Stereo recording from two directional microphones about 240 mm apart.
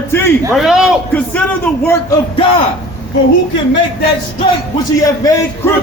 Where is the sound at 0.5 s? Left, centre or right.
Centre.